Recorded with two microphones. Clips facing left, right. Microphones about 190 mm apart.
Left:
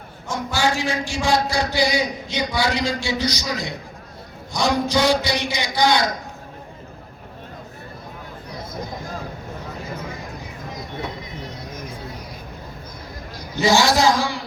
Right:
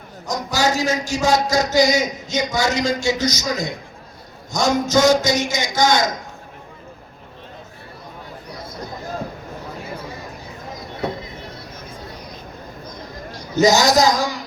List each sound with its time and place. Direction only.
0.3 s a man's voice: 40° right (ahead or behind)
13.6 s a man's voice: 40° right (ahead or behind)